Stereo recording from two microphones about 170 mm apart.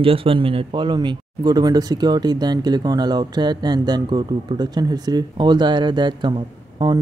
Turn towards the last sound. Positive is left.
turn(degrees=-25)  # may be behind; listen again after turning